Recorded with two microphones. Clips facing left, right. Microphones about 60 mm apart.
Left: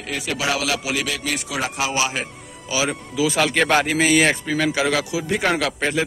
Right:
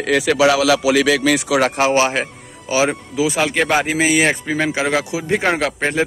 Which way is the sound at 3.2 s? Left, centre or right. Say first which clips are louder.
Right 1 dB; centre.